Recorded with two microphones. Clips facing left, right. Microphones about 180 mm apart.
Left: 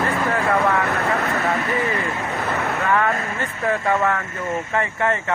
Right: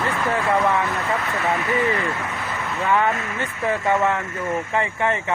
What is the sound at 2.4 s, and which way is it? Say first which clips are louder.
Waves: left 5 dB; 60° left (ahead or behind).